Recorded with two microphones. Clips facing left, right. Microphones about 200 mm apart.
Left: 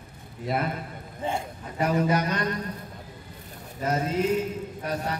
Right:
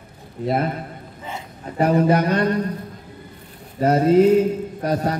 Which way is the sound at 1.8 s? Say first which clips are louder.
Right 7 dB; 55° right (ahead or behind).